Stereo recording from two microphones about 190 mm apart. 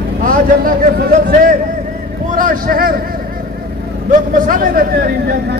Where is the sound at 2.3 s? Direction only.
50° right (ahead or behind).